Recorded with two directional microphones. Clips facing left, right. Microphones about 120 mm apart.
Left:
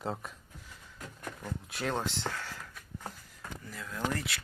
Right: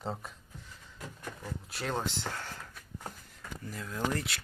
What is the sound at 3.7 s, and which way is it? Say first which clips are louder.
Speech: right 1 dB; 35° right (ahead or behind).